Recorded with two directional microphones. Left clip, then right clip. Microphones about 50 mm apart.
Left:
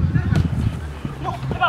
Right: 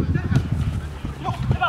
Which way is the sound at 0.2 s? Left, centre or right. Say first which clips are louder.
Left 2 dB; centre.